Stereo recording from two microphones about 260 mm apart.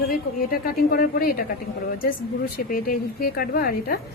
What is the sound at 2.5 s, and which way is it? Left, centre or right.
A woman's voice, left.